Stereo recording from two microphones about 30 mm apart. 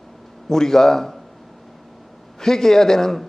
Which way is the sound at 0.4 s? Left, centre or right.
Centre.